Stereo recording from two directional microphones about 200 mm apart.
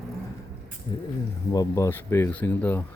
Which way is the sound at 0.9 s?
25° left (ahead or behind).